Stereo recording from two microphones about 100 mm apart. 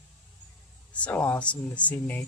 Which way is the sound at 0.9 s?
15° left (ahead or behind).